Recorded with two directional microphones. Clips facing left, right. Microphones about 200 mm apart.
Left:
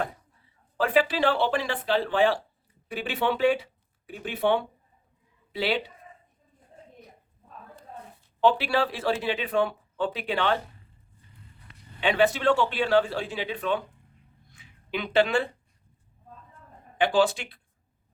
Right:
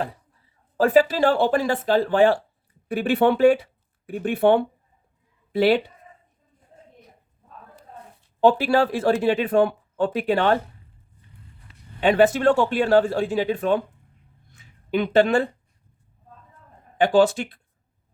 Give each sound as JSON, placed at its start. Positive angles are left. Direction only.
{"t": 0.8, "sound": "speech", "side_deg": -45}
{"t": 8.4, "sound": "speech", "side_deg": -45}
{"t": 11.9, "sound": "speech", "side_deg": -45}
{"t": 14.5, "sound": "a sound", "side_deg": -45}
{"t": 17.0, "sound": "speech", "side_deg": -45}